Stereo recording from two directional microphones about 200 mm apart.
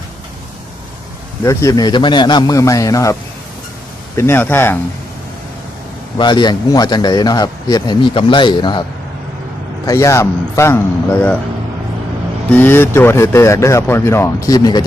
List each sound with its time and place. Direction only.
1.5 s speech: 15° left (ahead or behind)
6.1 s a man's voice: 20° left (ahead or behind)
9.8 s speech: 15° left (ahead or behind)
12.5 s speech: 10° left (ahead or behind)